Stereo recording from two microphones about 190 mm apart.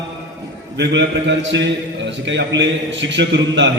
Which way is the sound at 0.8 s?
70° right (ahead or behind).